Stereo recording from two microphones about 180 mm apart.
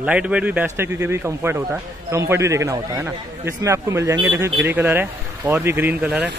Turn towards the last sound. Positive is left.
turn(degrees=-5)  # may be behind; listen again after turning